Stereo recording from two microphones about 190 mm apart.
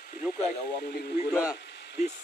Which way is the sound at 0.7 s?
55° left (ahead or behind).